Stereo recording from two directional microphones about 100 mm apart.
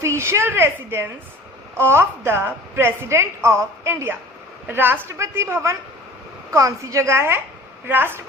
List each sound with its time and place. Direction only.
0.0 s a woman's voice: 25° right (ahead or behind)